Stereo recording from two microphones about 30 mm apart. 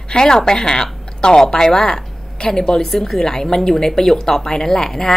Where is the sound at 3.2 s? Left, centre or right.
Centre.